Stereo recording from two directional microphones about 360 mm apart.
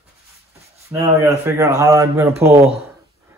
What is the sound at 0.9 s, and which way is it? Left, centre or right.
A man's voice, centre.